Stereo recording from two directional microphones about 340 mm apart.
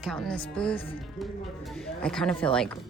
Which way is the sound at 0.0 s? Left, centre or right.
Centre.